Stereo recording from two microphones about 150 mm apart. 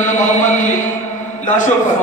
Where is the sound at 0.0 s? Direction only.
55° left (ahead or behind).